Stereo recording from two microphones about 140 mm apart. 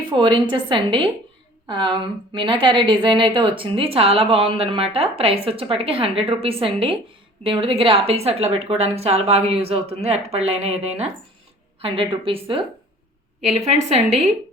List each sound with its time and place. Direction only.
0.1 s a woman's voice: 35° right (ahead or behind)
13.7 s speech: 50° right (ahead or behind)